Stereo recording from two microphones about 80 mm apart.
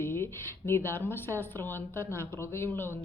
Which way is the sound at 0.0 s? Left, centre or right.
Left.